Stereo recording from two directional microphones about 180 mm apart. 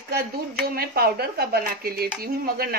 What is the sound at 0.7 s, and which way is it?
Speech, 60° right (ahead or behind).